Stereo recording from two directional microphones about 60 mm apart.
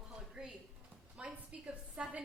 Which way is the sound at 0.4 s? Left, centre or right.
Centre.